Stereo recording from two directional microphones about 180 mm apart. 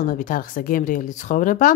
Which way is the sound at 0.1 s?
50° left (ahead or behind).